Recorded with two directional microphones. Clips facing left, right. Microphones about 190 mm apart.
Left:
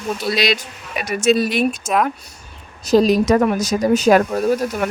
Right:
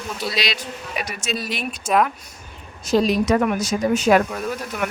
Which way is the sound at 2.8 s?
40° left (ahead or behind).